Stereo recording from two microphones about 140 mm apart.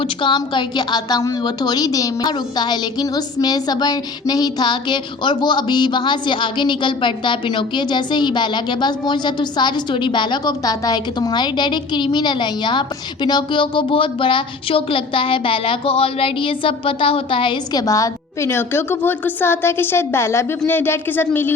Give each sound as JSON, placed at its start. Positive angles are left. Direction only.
{"t": 0.0, "sound": "a woman's voice", "side_deg": 35}